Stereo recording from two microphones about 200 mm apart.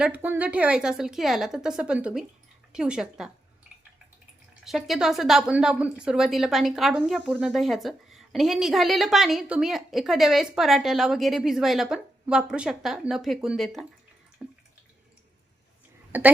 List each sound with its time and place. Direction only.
0.0 s a woman's voice: 10° right (ahead or behind)
4.6 s a woman's voice: centre (ahead or behind)
14.4 s drip: 5° right (ahead or behind)
16.1 s a woman's voice: 10° right (ahead or behind)